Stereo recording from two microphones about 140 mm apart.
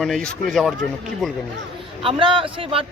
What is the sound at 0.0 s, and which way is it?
Speech, centre (ahead or behind).